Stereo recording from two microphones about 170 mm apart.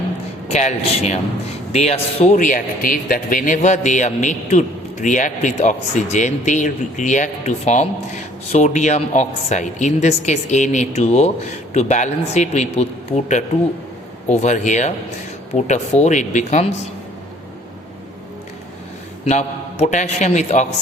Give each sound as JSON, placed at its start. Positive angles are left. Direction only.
{"t": 0.5, "sound": "a man's voice", "side_deg": 40}
{"t": 19.2, "sound": "speech", "side_deg": 45}